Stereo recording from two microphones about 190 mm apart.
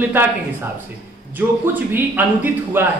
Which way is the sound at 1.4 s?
10° right (ahead or behind).